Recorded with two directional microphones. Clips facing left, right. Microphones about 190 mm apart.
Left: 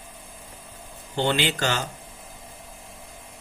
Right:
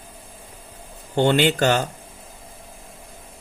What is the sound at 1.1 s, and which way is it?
Speech, 55° right (ahead or behind).